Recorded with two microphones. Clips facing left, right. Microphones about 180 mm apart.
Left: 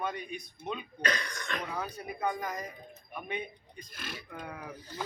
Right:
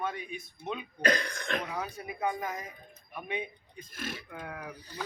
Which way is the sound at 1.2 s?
55° right (ahead or behind).